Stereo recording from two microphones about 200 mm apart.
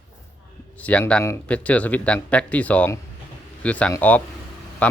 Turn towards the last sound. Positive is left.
turn(degrees=5)  # may be behind; listen again after turning